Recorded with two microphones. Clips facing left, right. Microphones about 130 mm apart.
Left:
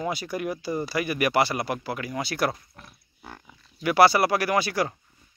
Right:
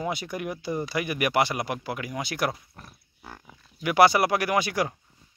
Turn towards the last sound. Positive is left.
turn(degrees=-15)  # may be behind; listen again after turning